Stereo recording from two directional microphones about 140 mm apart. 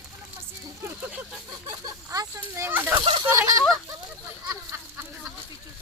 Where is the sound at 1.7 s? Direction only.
25° right (ahead or behind).